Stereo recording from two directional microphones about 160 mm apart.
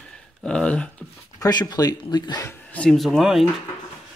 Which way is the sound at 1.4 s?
25° left (ahead or behind).